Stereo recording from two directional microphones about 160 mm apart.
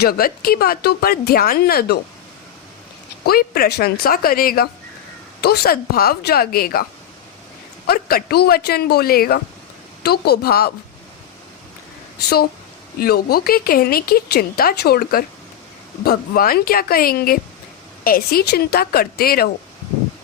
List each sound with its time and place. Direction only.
0.0 s a woman's voice: 70° left (ahead or behind)
3.2 s a woman's voice: 75° left (ahead or behind)
5.4 s a woman's voice: 75° left (ahead or behind)
7.9 s a woman's voice: 70° left (ahead or behind)
10.0 s a woman's voice: 85° left
13.0 s a woman's voice: 75° left (ahead or behind)